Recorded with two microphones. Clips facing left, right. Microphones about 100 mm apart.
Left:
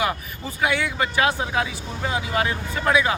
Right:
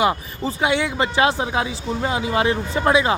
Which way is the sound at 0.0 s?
25° right (ahead or behind).